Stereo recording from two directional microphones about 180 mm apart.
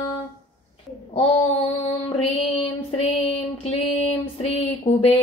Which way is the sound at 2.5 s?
30° left (ahead or behind).